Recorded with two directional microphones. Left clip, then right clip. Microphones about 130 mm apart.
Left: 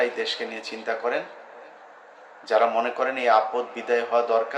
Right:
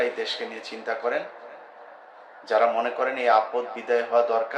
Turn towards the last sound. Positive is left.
turn(degrees=15)  # may be behind; listen again after turning